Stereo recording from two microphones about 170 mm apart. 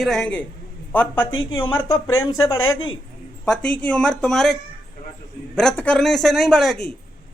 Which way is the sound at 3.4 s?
5° left (ahead or behind).